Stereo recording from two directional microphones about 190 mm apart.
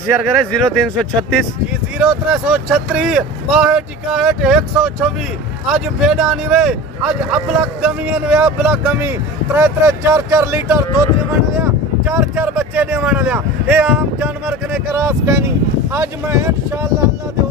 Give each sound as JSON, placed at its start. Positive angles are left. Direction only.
{"t": 0.0, "sound": "speech", "side_deg": 5}
{"t": 15.0, "sound": "speech", "side_deg": -15}